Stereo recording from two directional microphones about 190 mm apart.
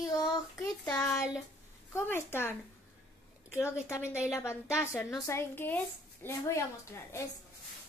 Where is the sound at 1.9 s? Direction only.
10° left (ahead or behind).